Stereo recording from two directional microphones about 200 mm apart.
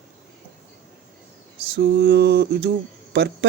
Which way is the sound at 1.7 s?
55° right (ahead or behind).